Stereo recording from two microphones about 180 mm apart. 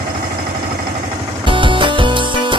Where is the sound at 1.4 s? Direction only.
25° right (ahead or behind).